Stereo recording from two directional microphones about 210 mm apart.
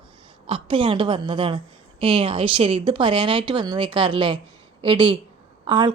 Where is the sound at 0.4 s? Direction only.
25° right (ahead or behind).